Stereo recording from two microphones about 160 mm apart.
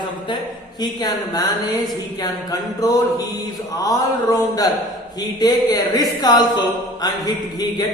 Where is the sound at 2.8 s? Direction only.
20° left (ahead or behind).